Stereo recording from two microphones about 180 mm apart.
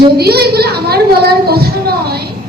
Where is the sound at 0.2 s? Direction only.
60° right (ahead or behind).